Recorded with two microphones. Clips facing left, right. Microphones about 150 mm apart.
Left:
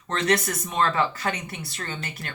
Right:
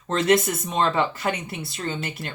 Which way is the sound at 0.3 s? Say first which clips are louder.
Right 4 dB; 25° right (ahead or behind).